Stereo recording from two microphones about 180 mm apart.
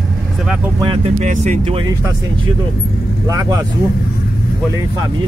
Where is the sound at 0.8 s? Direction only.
40° right (ahead or behind).